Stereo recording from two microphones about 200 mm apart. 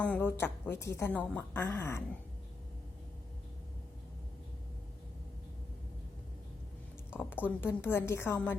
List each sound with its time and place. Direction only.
0.0 s a woman's voice: 10° left (ahead or behind)
7.2 s a woman's voice: 10° left (ahead or behind)